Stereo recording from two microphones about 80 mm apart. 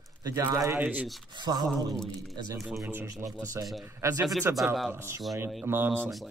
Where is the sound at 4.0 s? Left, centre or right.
Right.